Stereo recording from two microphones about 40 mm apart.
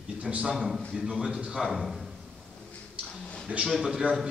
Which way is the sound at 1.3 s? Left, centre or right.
Right.